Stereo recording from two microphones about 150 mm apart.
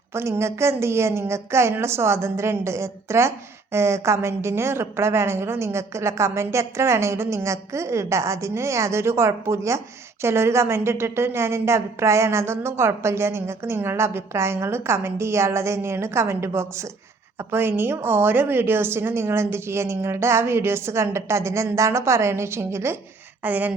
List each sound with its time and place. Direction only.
0.1 s a woman's voice: 15° right (ahead or behind)